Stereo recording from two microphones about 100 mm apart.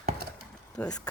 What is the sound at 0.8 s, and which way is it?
Speech, 15° left (ahead or behind).